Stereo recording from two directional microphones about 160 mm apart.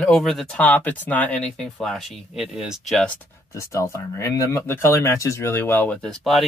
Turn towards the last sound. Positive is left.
turn(degrees=5)  # may be behind; listen again after turning